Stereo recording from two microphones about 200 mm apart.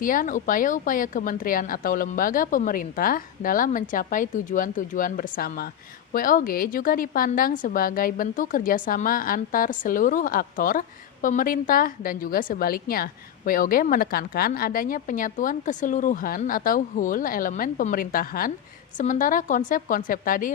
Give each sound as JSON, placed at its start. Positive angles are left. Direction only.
{"t": 0.0, "sound": "a woman's voice", "side_deg": 45}